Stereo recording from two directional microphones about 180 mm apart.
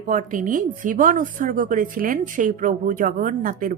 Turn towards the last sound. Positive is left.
turn(degrees=-50)  # may be behind; listen again after turning